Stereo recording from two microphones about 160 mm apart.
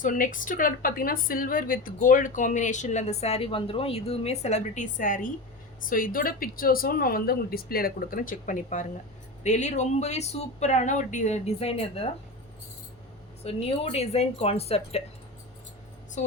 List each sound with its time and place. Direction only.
0.0 s a woman's voice: 55° left (ahead or behind); by 12.0 s 40° left (ahead or behind)
13.4 s speech: 40° left (ahead or behind)